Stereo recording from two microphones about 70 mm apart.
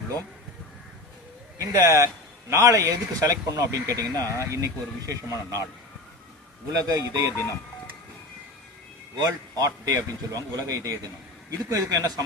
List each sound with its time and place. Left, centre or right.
1.5 s speech: right
4.4 s speech: right
6.8 s a man's voice: right
9.1 s a man's voice: right